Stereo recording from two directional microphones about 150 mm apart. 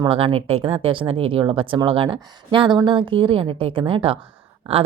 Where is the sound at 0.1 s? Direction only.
40° right (ahead or behind).